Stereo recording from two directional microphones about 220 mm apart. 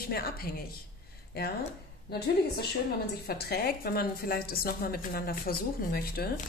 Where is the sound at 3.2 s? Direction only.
45° left (ahead or behind).